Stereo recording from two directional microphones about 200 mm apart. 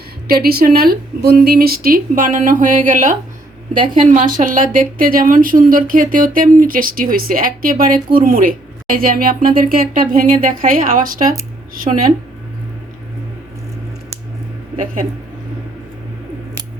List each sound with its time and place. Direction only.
0.3 s a woman's voice: 50° right (ahead or behind)